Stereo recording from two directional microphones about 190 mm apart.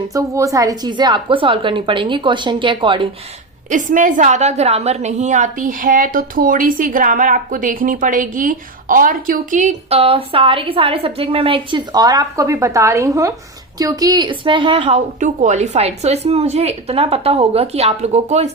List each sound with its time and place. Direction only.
0.1 s a woman's voice: 15° right (ahead or behind)
3.7 s a woman's voice: 45° right (ahead or behind)